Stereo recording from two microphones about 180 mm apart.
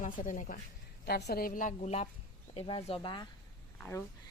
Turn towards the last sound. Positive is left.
turn(degrees=15)  # may be behind; listen again after turning